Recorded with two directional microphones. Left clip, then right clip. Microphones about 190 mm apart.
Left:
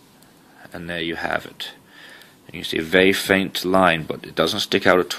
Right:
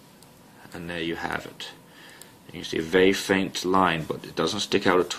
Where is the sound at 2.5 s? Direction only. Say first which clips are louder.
Left 5 dB; 40° left (ahead or behind).